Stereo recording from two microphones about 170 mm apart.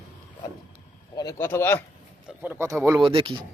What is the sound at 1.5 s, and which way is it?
Speech, 15° left (ahead or behind).